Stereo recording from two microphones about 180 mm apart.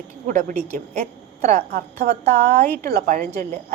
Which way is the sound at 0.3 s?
50° right (ahead or behind).